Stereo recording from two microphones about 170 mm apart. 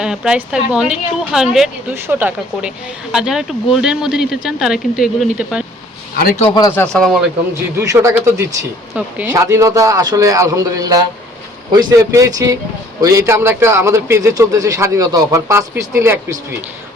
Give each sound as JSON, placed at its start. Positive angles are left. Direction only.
{"t": 0.0, "sound": "speech", "side_deg": -5}
{"t": 6.5, "sound": "speech", "side_deg": 20}
{"t": 6.7, "sound": "speech", "side_deg": 5}
{"t": 8.0, "sound": "a man's voice", "side_deg": -15}